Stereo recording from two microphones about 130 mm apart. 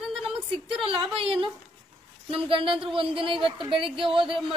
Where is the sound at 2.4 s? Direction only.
40° right (ahead or behind).